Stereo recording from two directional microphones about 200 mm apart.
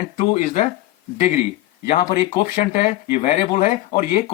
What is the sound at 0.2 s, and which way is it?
Speech, 35° left (ahead or behind).